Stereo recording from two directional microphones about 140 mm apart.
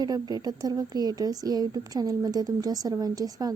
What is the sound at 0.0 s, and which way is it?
A woman's voice, 30° right (ahead or behind).